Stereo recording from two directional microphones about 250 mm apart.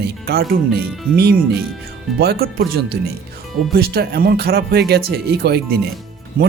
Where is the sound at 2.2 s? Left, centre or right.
Right.